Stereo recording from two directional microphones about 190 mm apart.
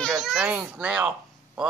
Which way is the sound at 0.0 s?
Centre (ahead or behind).